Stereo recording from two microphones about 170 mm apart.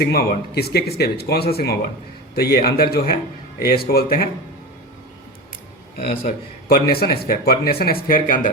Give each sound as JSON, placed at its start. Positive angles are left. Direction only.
{"t": 0.0, "sound": "a man's voice", "side_deg": 65}
{"t": 6.0, "sound": "a man's voice", "side_deg": 60}